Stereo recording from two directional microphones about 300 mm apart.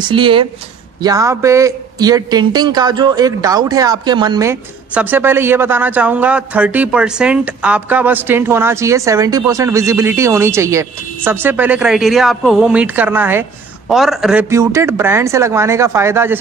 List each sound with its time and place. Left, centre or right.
0.0 s a man's voice: centre